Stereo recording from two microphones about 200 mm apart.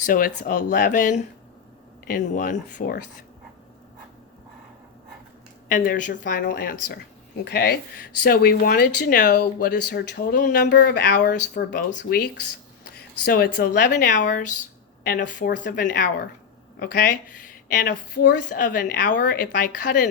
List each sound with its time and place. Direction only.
0.0 s speech: 45° left (ahead or behind)
5.6 s speech: 45° left (ahead or behind)